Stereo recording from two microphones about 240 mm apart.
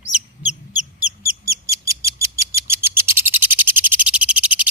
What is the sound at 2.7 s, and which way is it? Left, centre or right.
Frog, centre.